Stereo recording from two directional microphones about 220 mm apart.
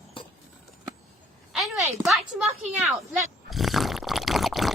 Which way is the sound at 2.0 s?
Centre (ahead or behind).